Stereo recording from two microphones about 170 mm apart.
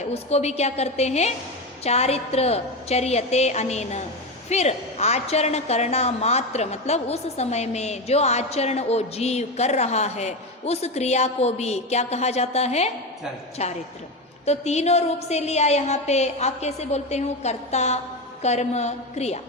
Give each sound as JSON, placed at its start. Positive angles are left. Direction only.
{"t": 0.1, "sound": "a woman's voice", "side_deg": 40}